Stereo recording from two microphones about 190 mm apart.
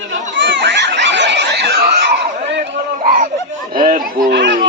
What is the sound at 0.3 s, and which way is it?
Snicker, 70° right (ahead or behind).